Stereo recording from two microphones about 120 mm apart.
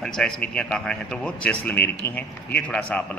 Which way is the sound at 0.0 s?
5° left (ahead or behind).